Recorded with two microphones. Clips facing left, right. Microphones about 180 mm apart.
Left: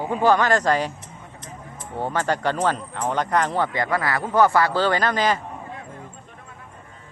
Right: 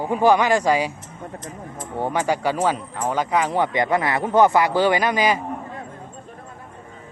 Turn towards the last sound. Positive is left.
turn(degrees=-10)  # may be behind; listen again after turning